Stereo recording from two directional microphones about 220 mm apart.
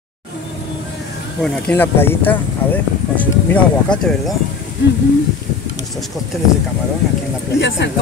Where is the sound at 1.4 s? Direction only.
10° left (ahead or behind).